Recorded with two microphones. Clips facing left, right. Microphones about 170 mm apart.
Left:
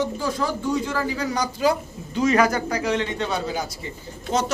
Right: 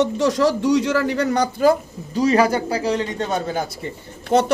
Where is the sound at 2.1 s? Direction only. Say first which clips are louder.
Right 3 dB; 30° right (ahead or behind).